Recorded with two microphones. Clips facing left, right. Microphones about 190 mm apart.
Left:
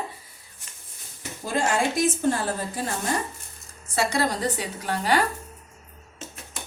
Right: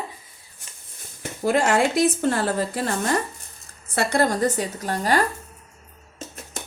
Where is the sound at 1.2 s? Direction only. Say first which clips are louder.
Right 6 dB; 65° right (ahead or behind).